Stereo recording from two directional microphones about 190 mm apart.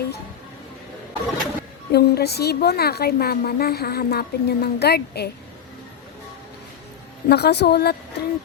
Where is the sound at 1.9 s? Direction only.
60° left (ahead or behind).